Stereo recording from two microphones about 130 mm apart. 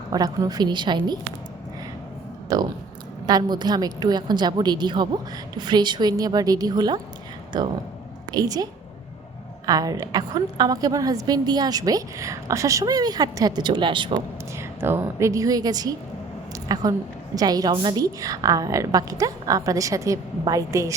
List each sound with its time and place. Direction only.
0.1 s a woman's voice: 30° right (ahead or behind)
2.5 s a woman's voice: 30° right (ahead or behind)
9.6 s a woman's voice: 30° right (ahead or behind)
14.6 s a woman's voice: 20° right (ahead or behind)